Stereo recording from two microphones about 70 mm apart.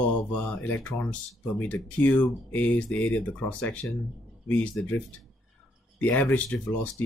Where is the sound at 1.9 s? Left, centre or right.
Left.